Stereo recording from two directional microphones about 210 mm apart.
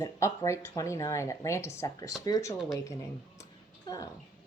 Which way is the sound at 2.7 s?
15° left (ahead or behind).